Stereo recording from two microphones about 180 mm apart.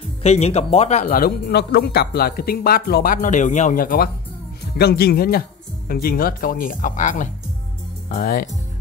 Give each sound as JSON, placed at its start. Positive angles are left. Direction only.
{"t": 0.2, "sound": "speech", "side_deg": 35}